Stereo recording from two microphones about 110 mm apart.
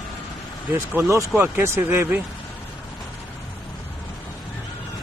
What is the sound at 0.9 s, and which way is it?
Speech, 20° right (ahead or behind).